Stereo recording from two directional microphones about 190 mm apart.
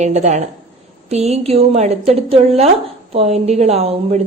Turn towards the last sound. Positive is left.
turn(degrees=-35)  # may be behind; listen again after turning